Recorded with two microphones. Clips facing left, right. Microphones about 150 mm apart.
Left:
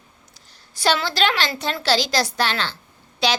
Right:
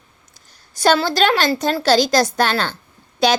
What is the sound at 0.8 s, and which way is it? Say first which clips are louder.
A woman's voice: right 5 dB; 45° right (ahead or behind).